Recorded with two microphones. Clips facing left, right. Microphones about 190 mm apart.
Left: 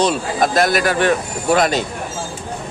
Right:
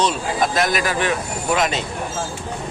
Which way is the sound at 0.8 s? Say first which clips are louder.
Left 5 dB; 55° left (ahead or behind).